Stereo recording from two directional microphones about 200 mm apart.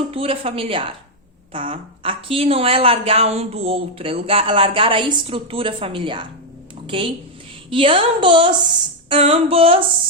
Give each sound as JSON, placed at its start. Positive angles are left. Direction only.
{"t": 0.1, "sound": "a woman's voice", "side_deg": -30}